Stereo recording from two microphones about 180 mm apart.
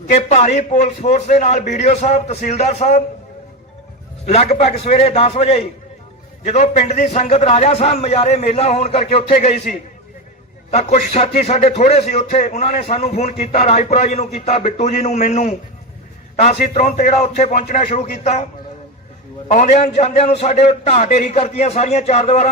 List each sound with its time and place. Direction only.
0.1 s a man's voice: 40° left (ahead or behind)
4.5 s a man's voice: 35° left (ahead or behind)
19.5 s a man's voice: 40° left (ahead or behind)